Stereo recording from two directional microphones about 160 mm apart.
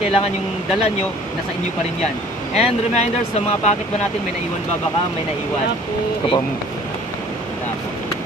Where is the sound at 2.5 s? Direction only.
40° left (ahead or behind).